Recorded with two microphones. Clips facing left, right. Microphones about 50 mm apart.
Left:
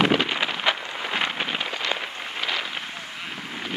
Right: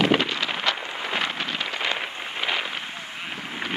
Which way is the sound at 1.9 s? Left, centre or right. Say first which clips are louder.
Even; centre.